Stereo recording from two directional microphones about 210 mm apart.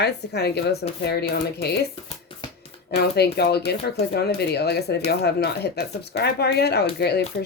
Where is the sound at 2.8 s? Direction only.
50° left (ahead or behind).